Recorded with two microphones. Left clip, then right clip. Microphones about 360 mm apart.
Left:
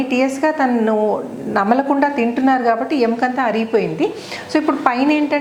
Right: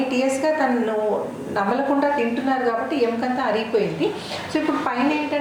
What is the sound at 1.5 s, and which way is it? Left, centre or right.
Speech, left.